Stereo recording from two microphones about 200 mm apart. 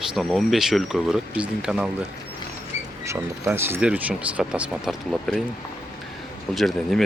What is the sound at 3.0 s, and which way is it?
Speech, 10° right (ahead or behind).